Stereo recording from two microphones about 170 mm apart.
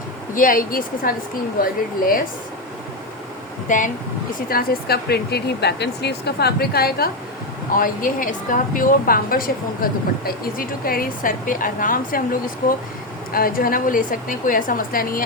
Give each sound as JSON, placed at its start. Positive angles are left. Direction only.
{"t": 0.3, "sound": "a woman's voice", "side_deg": 55}
{"t": 3.7, "sound": "speech", "side_deg": 50}
{"t": 4.4, "sound": "speech", "side_deg": 60}
{"t": 7.8, "sound": "a woman's voice", "side_deg": 55}
{"t": 13.3, "sound": "a woman's voice", "side_deg": 60}